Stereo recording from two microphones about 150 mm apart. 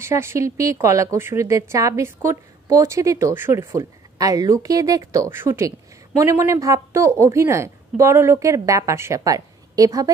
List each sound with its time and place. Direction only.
0.0 s a woman's voice: 20° right (ahead or behind)